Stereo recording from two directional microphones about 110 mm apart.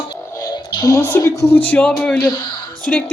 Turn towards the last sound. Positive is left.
turn(degrees=5)  # may be behind; listen again after turning